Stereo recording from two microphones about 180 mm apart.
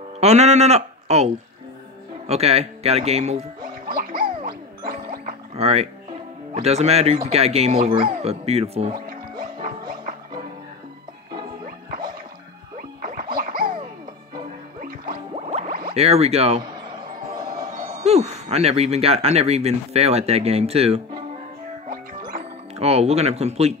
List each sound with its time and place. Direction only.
0.2 s speech: 40° right (ahead or behind)
3.8 s music: 50° right (ahead or behind)
5.6 s speech: 35° right (ahead or behind)
8.9 s music: 50° right (ahead or behind)
12.7 s music: 50° right (ahead or behind)
15.3 s a sound: 35° right (ahead or behind)
15.9 s speech: 35° right (ahead or behind)
17.6 s speech: 40° right (ahead or behind)
21.8 s music: 50° right (ahead or behind)
22.8 s speech: 35° right (ahead or behind)